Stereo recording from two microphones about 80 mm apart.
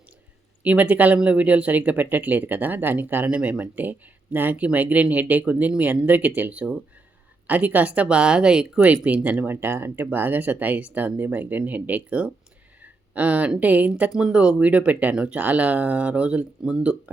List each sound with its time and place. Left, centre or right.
0.6 s speech: centre